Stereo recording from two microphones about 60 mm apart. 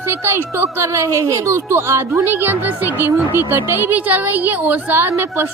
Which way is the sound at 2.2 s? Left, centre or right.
Right.